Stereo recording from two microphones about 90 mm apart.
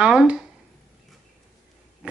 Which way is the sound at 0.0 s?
5° right (ahead or behind).